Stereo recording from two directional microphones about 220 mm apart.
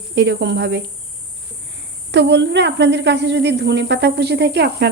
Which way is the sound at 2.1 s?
50° right (ahead or behind).